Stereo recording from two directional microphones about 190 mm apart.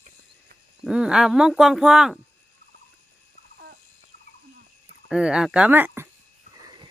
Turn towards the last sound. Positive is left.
turn(degrees=-20)  # may be behind; listen again after turning